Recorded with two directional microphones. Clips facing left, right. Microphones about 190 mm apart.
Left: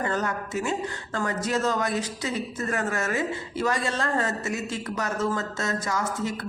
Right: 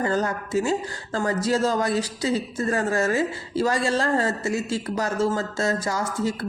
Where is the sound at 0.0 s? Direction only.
30° right (ahead or behind).